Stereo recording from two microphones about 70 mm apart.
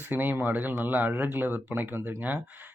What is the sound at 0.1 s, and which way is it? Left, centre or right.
A man's voice, right.